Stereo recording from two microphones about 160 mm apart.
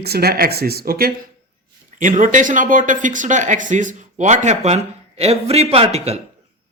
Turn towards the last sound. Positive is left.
turn(degrees=-40)  # may be behind; listen again after turning